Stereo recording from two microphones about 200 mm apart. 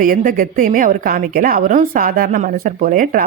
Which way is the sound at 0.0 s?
45° right (ahead or behind).